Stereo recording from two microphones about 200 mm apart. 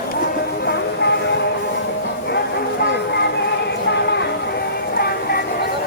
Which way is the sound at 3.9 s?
60° left (ahead or behind).